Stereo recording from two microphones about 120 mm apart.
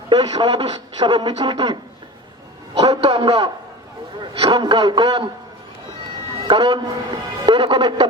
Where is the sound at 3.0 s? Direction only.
55° right (ahead or behind).